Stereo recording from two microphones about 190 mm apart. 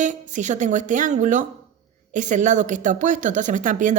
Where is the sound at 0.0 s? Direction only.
40° right (ahead or behind).